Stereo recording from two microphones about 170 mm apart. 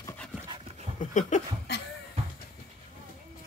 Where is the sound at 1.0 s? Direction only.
45° left (ahead or behind).